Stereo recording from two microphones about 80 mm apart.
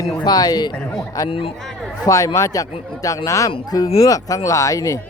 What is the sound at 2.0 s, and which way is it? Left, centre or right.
Speech, left.